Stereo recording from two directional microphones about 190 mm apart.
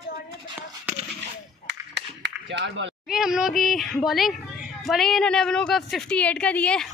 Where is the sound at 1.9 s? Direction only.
65° right (ahead or behind).